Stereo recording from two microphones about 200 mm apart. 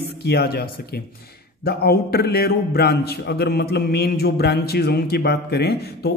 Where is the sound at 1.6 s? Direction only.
50° left (ahead or behind).